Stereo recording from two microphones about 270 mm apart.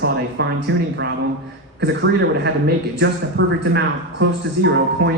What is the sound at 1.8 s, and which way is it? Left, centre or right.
Speech, right.